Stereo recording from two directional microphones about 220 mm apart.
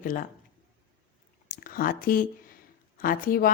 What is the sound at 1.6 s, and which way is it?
Speech, 40° left (ahead or behind).